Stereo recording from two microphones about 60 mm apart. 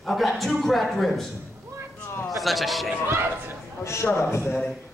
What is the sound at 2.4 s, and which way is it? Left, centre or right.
Speech, centre.